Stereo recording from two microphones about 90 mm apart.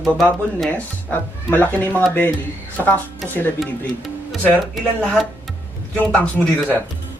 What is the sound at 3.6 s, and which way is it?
Speech, centre (ahead or behind).